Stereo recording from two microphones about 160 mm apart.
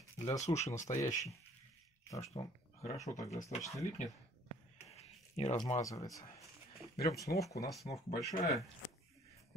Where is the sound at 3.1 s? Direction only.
20° left (ahead or behind).